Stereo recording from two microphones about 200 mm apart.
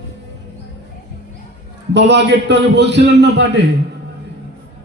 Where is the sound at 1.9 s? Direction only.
60° right (ahead or behind).